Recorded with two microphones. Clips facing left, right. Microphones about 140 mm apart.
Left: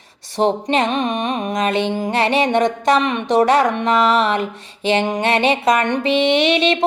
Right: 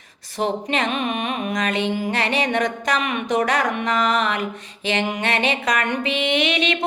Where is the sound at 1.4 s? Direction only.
40° left (ahead or behind).